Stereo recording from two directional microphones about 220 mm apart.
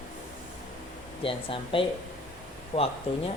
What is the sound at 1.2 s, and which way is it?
A woman's voice, 25° left (ahead or behind).